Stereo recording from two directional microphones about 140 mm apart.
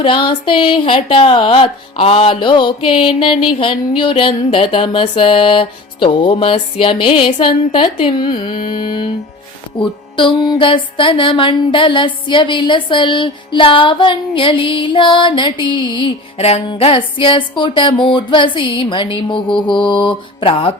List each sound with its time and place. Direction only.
0.0 s speech: 35° left (ahead or behind)
16.4 s speech: 45° left (ahead or behind)